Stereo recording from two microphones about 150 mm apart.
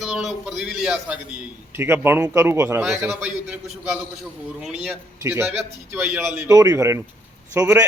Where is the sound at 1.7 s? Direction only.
15° right (ahead or behind).